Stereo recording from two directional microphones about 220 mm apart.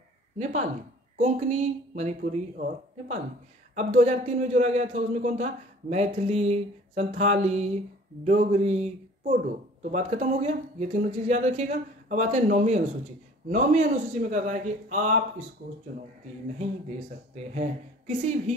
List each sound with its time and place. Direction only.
0.4 s a man's voice: 30° right (ahead or behind)
17.3 s a man's voice: 30° right (ahead or behind)